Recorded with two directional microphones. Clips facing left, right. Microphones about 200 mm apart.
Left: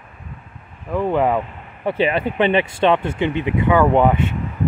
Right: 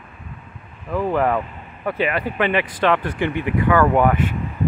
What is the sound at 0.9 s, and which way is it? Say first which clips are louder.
Speech: left 2 dB; 20° left (ahead or behind).